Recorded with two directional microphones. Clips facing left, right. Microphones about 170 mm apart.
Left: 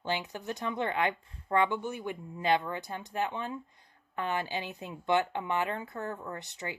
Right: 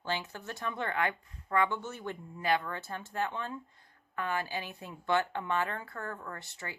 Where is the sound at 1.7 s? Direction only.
15° left (ahead or behind).